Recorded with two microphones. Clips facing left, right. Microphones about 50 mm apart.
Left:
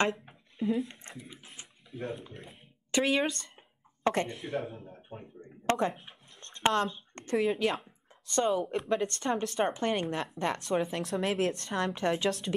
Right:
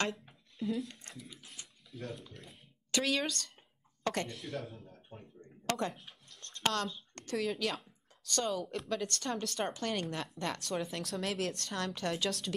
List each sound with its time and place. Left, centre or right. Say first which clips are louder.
0.6 s speech: left 5 dB; centre
5.4 s a sound: left 6 dB; left
7.2 s speech: left 7 dB; left